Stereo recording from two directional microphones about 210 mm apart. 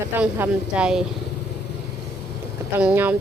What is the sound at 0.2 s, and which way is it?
Speech, 5° right (ahead or behind).